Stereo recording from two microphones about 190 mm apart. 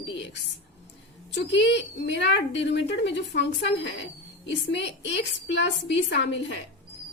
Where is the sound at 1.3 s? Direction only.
65° left (ahead or behind).